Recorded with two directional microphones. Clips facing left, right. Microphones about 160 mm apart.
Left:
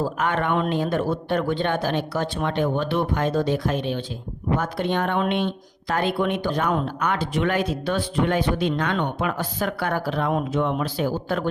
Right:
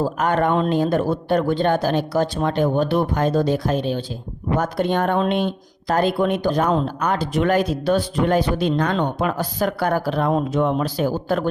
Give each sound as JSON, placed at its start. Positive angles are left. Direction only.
{"t": 0.0, "sound": "speech", "side_deg": -40}